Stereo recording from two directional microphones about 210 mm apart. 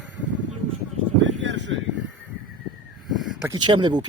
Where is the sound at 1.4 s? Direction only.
60° right (ahead or behind).